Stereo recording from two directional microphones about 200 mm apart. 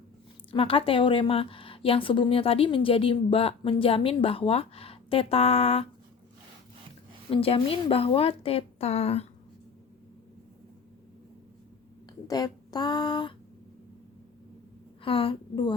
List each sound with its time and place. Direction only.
0.5 s a woman's voice: 25° left (ahead or behind)
7.3 s a woman's voice: 30° left (ahead or behind)
12.3 s a woman's voice: 20° left (ahead or behind)
15.0 s a woman's voice: 25° left (ahead or behind)